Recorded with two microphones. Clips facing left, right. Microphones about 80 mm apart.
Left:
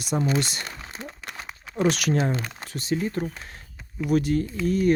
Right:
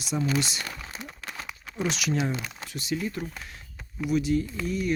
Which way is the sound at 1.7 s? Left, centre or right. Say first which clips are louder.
Left 6 dB; left.